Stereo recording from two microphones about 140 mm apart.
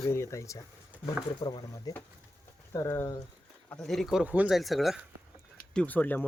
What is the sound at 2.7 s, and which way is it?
Speech, 20° left (ahead or behind).